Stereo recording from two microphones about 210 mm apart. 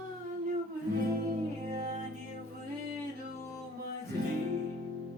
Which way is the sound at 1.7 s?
35° right (ahead or behind).